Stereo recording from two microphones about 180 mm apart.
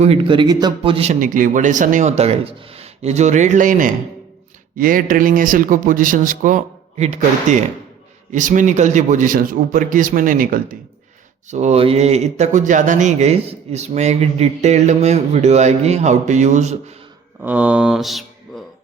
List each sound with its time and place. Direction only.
0.0 s speech: 30° right (ahead or behind)
1.2 s speech: 50° right (ahead or behind)
17.4 s mantra: 10° right (ahead or behind)